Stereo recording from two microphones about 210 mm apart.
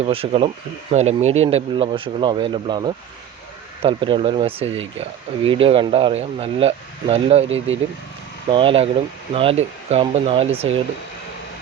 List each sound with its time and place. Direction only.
0.0 s speech: 30° right (ahead or behind)
7.4 s speech: 65° right (ahead or behind)
8.4 s speech: 25° right (ahead or behind)